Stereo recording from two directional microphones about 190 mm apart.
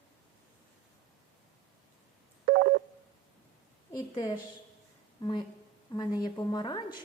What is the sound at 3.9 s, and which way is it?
A woman's voice, 20° left (ahead or behind).